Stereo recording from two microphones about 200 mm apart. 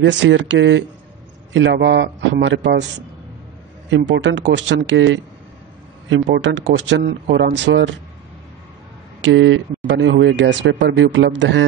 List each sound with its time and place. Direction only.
0.0 s speech: 65° right (ahead or behind)
3.9 s speech: 60° right (ahead or behind)
9.2 s speech: 70° right (ahead or behind)